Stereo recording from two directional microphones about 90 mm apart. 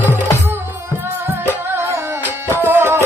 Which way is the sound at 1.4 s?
25° right (ahead or behind).